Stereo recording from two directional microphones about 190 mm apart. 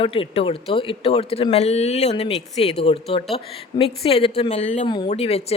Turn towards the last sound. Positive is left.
turn(degrees=35)  # may be behind; listen again after turning